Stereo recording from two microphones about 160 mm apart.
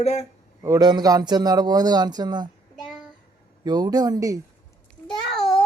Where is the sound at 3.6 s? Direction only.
25° right (ahead or behind).